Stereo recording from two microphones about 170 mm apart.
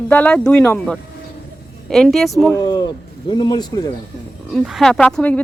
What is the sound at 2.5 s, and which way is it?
Speech, 25° left (ahead or behind).